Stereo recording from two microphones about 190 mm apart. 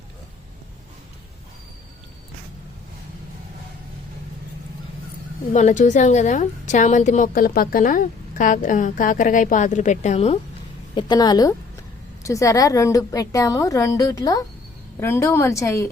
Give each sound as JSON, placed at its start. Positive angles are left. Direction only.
{"t": 5.5, "sound": "a woman's voice", "side_deg": 40}
{"t": 10.9, "sound": "a woman's voice", "side_deg": 20}